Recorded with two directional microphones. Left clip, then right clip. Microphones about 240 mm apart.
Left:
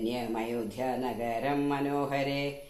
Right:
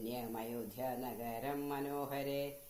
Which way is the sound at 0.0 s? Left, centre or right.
Right.